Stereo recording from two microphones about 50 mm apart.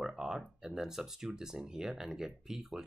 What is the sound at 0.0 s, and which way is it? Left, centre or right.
Speech, centre.